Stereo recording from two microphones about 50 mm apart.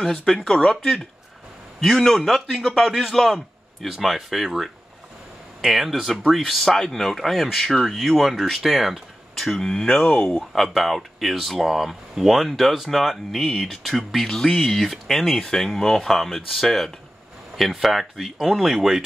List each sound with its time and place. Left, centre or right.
0.1 s speech: centre
1.8 s a man's voice: centre
9.8 s speech: centre
10.7 s speech: centre